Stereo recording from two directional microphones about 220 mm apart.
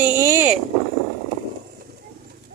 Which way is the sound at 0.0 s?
10° right (ahead or behind).